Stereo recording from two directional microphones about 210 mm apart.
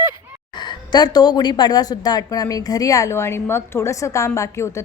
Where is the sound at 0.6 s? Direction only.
20° left (ahead or behind).